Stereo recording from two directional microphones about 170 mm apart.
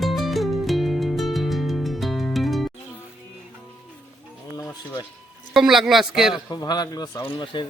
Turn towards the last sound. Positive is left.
turn(degrees=25)  # may be behind; listen again after turning